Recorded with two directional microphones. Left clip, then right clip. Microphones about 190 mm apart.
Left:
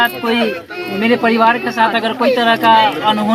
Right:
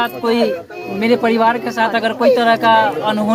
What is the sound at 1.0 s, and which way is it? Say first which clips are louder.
Speech: left 1 dB; 15° right (ahead or behind).